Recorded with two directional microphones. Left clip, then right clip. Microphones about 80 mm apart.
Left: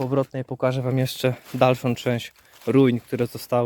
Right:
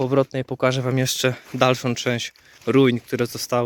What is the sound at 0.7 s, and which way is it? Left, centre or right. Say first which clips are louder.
Speech: right 3 dB; centre.